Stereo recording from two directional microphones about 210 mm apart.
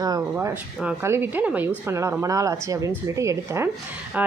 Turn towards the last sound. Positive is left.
turn(degrees=-10)  # may be behind; listen again after turning